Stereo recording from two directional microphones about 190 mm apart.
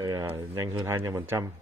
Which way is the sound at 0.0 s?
20° right (ahead or behind).